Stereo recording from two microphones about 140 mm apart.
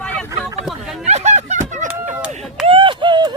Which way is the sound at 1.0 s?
55° right (ahead or behind).